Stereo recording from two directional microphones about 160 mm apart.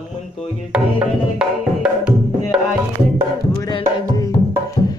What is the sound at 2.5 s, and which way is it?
Music, 5° right (ahead or behind).